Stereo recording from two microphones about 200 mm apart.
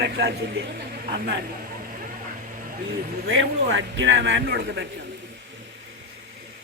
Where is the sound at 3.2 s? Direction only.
65° right (ahead or behind).